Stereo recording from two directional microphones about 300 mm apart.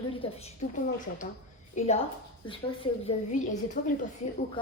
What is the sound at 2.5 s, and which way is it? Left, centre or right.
A woman's voice, centre.